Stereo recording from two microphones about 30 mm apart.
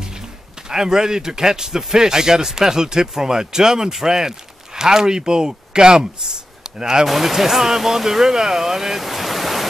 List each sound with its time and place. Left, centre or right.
0.7 s speech: right
7.1 s speech: centre
9.0 s ocean: centre